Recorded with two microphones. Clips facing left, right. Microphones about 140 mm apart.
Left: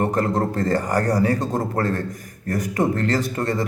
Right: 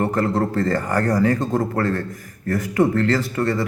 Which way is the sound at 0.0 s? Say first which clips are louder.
Right 1 dB; 15° left (ahead or behind).